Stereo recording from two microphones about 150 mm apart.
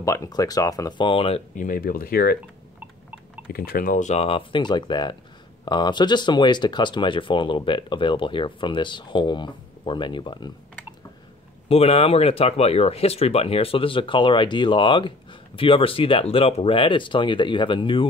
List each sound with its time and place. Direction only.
0.0 s speech: 20° left (ahead or behind); by 1.4 s 35° left (ahead or behind)
1.5 s speech: 65° left (ahead or behind); by 2.3 s 80° left
3.5 s speech: 85° left; by 10.5 s 30° left (ahead or behind)
11.7 s speech: 40° left (ahead or behind)